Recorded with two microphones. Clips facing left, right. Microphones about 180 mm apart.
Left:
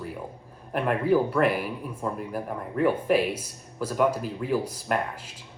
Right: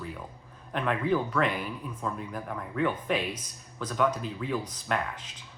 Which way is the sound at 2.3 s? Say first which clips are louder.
Left 4 dB; 30° left (ahead or behind).